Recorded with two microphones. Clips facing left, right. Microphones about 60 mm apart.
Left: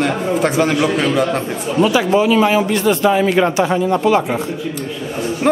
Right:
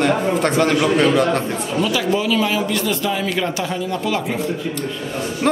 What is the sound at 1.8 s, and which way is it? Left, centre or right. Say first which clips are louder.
A man's voice: left 7 dB; left.